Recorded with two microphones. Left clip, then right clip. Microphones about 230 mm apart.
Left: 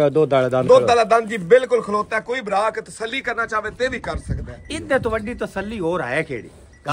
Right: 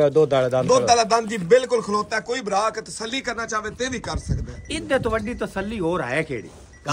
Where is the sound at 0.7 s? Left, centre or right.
Centre.